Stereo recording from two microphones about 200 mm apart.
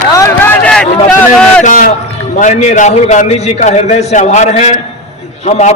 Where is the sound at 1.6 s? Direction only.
40° left (ahead or behind).